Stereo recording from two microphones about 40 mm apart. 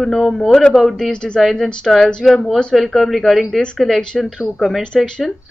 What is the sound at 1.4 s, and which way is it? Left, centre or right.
Speech, centre.